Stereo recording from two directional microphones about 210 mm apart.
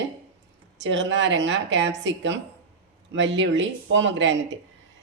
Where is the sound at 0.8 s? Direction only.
60° right (ahead or behind).